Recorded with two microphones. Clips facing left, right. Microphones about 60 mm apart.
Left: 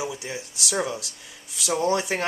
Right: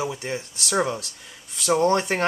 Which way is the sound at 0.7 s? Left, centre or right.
Right.